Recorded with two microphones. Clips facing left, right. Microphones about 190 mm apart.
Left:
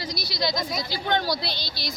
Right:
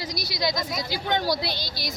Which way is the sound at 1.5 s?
45° right (ahead or behind).